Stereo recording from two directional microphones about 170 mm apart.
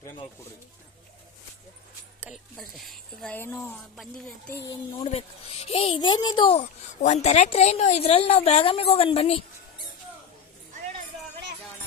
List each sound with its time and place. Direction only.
2.2 s a sound: centre (ahead or behind)
5.0 s speech: 40° left (ahead or behind)
6.5 s speech: 45° left (ahead or behind)